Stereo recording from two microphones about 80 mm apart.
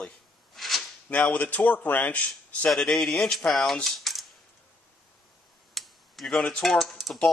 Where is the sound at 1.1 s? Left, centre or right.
Centre.